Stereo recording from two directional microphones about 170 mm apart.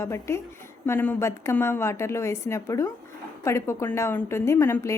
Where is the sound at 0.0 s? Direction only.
15° left (ahead or behind).